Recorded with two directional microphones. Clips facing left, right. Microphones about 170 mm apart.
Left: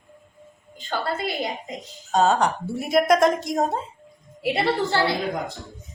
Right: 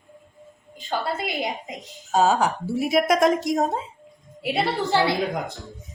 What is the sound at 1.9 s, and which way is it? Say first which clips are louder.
A woman's voice: even; 5° right (ahead or behind).